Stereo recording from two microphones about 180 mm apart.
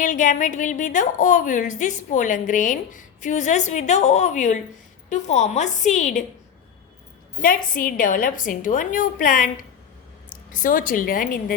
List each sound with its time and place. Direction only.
0.0 s a woman's voice: 45° left (ahead or behind)
7.4 s a woman's voice: 50° left (ahead or behind)
10.5 s a woman's voice: 50° left (ahead or behind)